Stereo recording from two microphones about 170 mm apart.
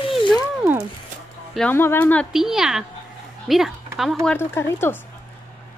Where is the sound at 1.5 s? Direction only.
10° left (ahead or behind).